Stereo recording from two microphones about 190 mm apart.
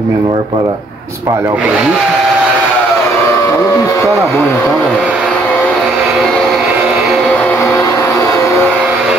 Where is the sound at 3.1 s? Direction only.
15° left (ahead or behind).